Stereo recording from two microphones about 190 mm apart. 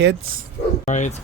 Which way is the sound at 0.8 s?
40° left (ahead or behind).